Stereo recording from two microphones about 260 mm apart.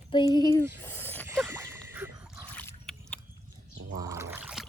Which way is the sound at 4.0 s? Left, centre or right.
Centre.